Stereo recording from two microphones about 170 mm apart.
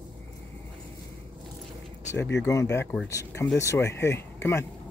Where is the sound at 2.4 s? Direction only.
15° left (ahead or behind).